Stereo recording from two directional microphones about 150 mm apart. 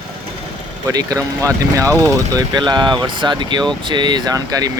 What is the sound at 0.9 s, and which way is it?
Speech, 25° right (ahead or behind).